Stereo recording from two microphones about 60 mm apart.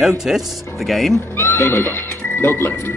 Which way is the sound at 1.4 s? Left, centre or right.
Left.